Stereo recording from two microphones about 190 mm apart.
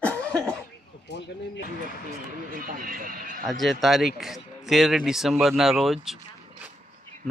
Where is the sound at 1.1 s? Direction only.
65° left (ahead or behind).